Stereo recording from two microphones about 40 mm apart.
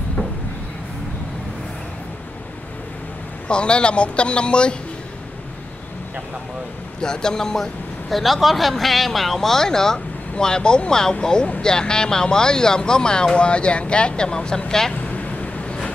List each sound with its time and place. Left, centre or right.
3.4 s speech: left
7.0 s speech: centre
15.0 s vehicle: left